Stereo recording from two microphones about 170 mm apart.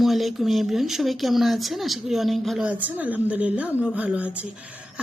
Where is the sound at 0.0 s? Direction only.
Centre (ahead or behind).